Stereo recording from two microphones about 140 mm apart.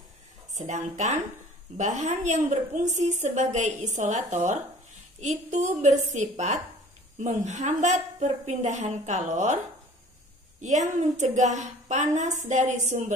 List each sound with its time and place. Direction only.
0.6 s a woman's voice: 60° right (ahead or behind)
10.6 s a woman's voice: 60° right (ahead or behind)